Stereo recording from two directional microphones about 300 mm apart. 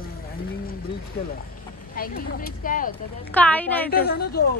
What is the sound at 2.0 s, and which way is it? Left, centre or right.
Speech, left.